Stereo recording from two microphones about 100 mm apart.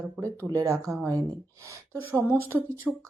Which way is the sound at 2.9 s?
10° right (ahead or behind).